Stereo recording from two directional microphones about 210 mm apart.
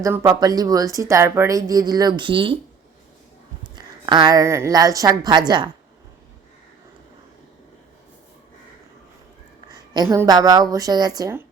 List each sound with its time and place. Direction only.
0.0 s speech: 15° right (ahead or behind)
3.8 s speech: 20° right (ahead or behind)
9.9 s speech: 15° right (ahead or behind)